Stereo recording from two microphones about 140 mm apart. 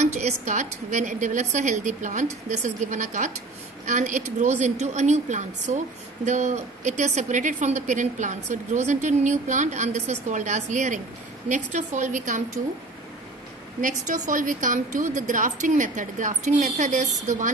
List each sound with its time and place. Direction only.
0.0 s a woman's voice: 55° right (ahead or behind)
13.7 s a woman's voice: 70° right (ahead or behind)